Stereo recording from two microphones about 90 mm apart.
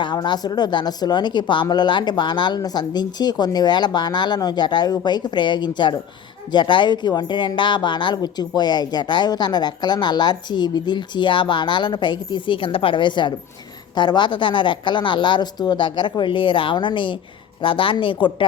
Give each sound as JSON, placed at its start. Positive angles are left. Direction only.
{"t": 0.0, "sound": "speech", "side_deg": 55}